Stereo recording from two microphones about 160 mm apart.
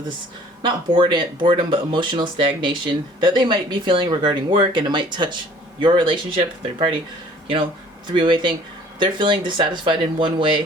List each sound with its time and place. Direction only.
0.6 s speech: 30° right (ahead or behind)
8.0 s speech: 30° right (ahead or behind)